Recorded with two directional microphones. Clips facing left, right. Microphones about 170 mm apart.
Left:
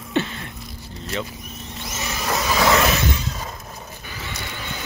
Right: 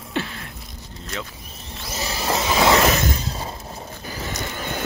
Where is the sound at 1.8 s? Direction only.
35° right (ahead or behind).